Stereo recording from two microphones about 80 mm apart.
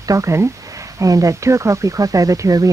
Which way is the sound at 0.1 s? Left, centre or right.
Right.